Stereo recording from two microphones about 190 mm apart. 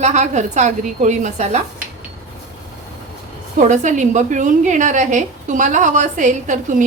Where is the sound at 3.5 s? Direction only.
40° right (ahead or behind).